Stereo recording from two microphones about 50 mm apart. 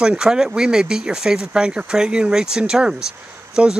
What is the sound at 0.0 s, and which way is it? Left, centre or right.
Speech, centre.